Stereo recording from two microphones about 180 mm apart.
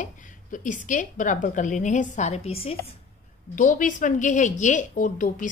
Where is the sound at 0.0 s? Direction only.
45° left (ahead or behind).